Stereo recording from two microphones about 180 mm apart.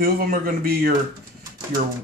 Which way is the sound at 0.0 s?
50° right (ahead or behind).